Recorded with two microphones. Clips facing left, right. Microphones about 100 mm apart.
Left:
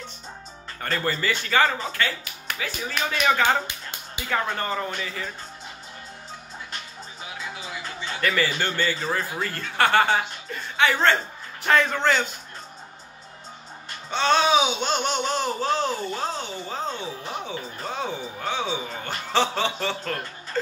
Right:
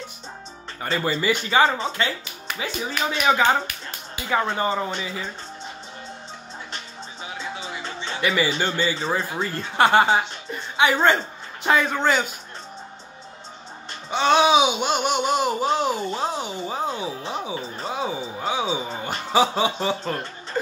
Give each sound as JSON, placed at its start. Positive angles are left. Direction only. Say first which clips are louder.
{"t": 0.7, "sound": "speech", "louder": "right 2 dB", "side_deg": -10}
{"t": 4.6, "sound": "speech", "louder": "right 4 dB", "side_deg": -15}
{"t": 7.3, "sound": "music", "louder": "right 3 dB", "side_deg": -25}
{"t": 8.2, "sound": "speech", "louder": "right 2 dB", "side_deg": -10}
{"t": 14.1, "sound": "speech", "louder": "right 3 dB", "side_deg": -15}